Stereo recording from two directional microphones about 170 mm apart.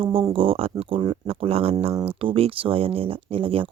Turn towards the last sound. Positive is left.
turn(degrees=-35)  # may be behind; listen again after turning